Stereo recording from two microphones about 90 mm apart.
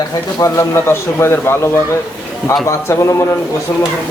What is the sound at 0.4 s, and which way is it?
A man's voice, 35° left (ahead or behind).